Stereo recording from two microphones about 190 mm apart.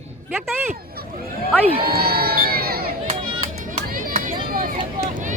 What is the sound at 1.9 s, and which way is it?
Crowd, 55° right (ahead or behind).